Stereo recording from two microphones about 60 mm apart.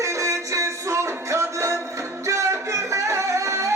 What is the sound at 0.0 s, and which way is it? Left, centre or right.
Music, right.